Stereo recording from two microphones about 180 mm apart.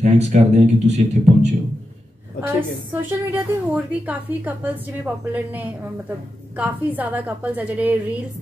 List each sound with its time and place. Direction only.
0.0 s speech: 40° right (ahead or behind)
2.4 s a woman's voice: 10° right (ahead or behind)